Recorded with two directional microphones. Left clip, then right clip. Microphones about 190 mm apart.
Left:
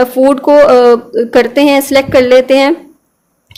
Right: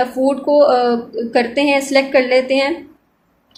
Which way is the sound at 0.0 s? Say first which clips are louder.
Left 8 dB; 50° left (ahead or behind).